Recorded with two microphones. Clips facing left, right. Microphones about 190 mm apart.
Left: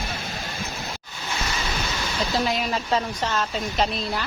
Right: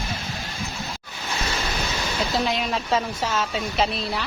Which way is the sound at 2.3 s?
Centre (ahead or behind).